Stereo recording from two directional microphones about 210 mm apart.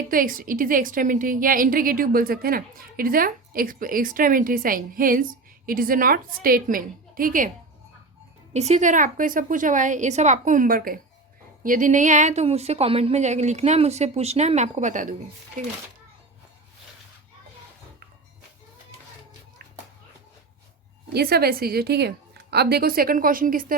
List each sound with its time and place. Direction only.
0.1 s a woman's voice: 40° right (ahead or behind)
8.5 s a woman's voice: 30° right (ahead or behind)
21.1 s a woman's voice: 50° right (ahead or behind)